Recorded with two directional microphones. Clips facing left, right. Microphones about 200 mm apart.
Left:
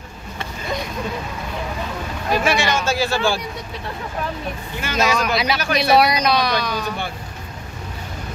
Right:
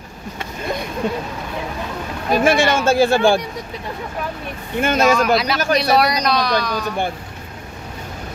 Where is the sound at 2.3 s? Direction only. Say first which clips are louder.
Right 4 dB; 50° right (ahead or behind).